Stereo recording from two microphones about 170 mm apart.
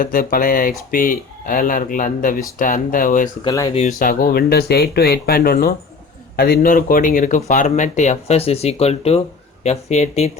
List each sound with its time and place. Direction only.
0.0 s speech: 55° left (ahead or behind)
3.4 s speech: 20° left (ahead or behind)
3.8 s speech: 45° left (ahead or behind)